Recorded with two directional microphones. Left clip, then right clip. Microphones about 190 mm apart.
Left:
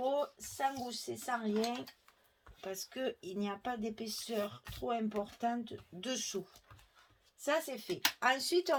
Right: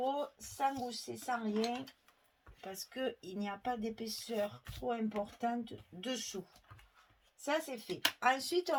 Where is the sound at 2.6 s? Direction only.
35° left (ahead or behind).